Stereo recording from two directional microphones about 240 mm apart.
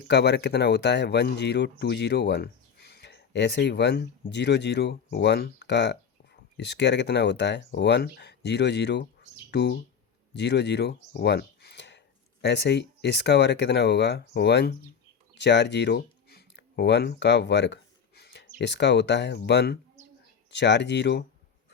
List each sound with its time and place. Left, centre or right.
0.1 s speech: left